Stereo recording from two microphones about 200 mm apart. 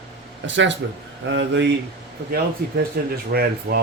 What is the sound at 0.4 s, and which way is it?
Speech, 65° right (ahead or behind).